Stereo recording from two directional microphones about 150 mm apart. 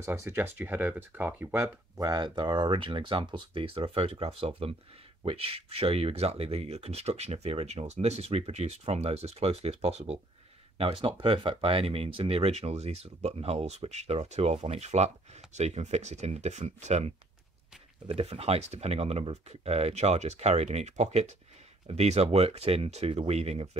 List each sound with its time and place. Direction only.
0.0 s speech: 15° right (ahead or behind); by 23.8 s 45° right (ahead or behind)